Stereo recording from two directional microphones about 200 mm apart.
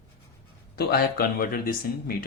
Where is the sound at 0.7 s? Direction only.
50° left (ahead or behind).